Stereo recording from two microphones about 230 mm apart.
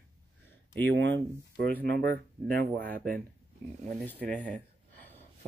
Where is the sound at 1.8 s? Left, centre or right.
Right.